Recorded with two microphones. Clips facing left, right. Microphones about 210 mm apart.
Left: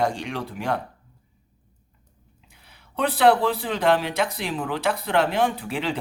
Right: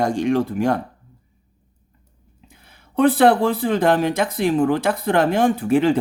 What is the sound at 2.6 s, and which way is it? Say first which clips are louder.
Speech: right 9 dB; 45° right (ahead or behind).